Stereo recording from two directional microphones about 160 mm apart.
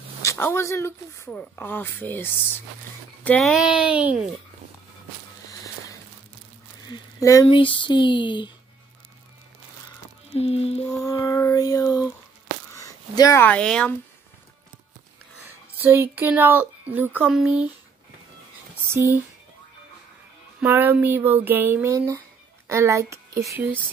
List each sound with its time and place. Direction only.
0.2 s speech: 20° left (ahead or behind)
3.3 s speech: centre (ahead or behind)
6.9 s speech: 20° left (ahead or behind)
7.4 s a sound: 30° left (ahead or behind)
10.3 s a sound: 40° left (ahead or behind)
10.9 s a sound: 20° left (ahead or behind)
13.4 s speech: 10° left (ahead or behind)
15.4 s speech: 15° right (ahead or behind)
18.9 s speech: 20° right (ahead or behind)
20.6 s speech: 15° right (ahead or behind)